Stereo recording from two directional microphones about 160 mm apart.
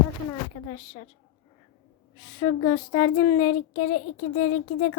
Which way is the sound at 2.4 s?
30° left (ahead or behind).